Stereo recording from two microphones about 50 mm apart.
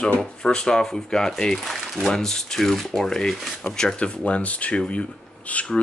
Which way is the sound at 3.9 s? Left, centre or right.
Left.